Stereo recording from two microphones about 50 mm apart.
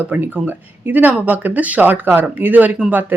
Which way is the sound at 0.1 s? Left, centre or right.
Right.